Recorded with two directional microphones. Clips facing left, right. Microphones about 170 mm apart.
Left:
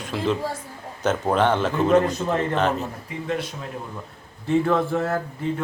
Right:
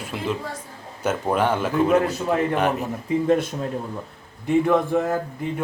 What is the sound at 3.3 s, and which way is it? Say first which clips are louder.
Speech: right 6 dB; 50° right (ahead or behind).